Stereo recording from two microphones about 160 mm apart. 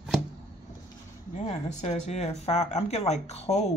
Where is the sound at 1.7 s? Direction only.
45° left (ahead or behind).